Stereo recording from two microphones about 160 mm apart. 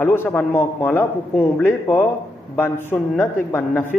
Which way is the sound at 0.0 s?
15° left (ahead or behind).